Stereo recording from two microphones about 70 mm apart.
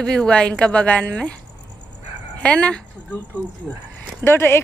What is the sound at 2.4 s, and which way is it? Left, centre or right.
Speech, centre.